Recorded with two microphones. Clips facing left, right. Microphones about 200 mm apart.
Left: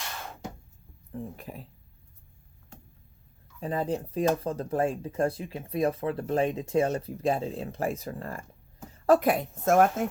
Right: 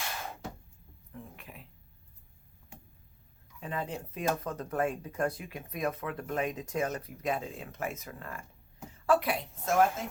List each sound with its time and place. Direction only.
1.1 s speech: 35° left (ahead or behind)
3.6 s speech: 35° left (ahead or behind)